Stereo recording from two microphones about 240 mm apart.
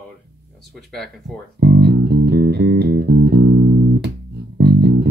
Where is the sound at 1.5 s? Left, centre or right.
Right.